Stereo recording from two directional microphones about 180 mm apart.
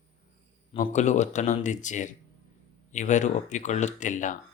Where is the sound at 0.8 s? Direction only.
40° left (ahead or behind).